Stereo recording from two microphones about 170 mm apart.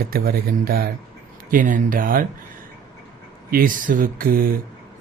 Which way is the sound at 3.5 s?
55° right (ahead or behind).